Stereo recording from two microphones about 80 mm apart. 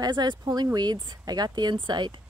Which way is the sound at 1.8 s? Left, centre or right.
Right.